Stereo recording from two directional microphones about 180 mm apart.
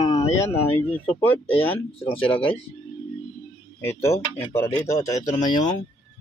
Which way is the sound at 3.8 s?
15° left (ahead or behind).